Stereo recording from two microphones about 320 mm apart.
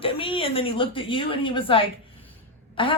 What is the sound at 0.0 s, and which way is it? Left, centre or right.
A woman's voice, centre.